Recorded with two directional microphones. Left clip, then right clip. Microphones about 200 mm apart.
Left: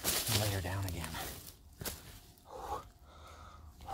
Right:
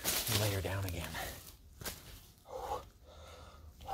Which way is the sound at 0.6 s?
15° right (ahead or behind).